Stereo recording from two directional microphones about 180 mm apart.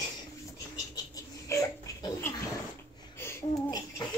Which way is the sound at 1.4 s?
15° left (ahead or behind).